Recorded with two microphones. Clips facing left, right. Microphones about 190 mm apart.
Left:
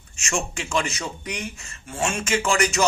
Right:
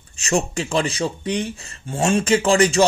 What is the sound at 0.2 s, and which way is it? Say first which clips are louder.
Speech: right 7 dB; 35° right (ahead or behind).